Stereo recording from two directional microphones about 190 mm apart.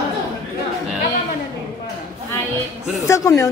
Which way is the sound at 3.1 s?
20° left (ahead or behind).